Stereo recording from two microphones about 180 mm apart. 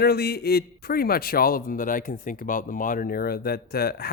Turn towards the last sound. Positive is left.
turn(degrees=60)  # may be behind; listen again after turning